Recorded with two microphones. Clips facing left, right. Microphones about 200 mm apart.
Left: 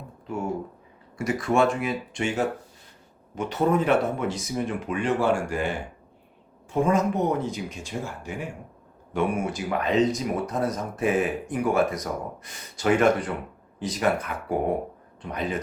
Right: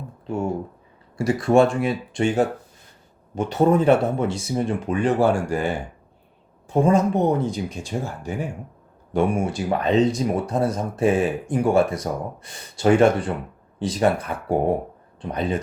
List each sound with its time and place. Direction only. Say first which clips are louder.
1.2 s speech: right 5 dB; 30° right (ahead or behind)
6.7 s speech: right 4 dB; 30° right (ahead or behind)